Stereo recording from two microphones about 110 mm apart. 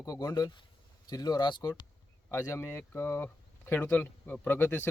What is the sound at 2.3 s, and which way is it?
Speech, 25° left (ahead or behind).